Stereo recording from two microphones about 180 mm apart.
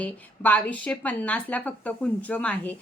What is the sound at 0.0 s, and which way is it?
A woman's voice, 10° left (ahead or behind).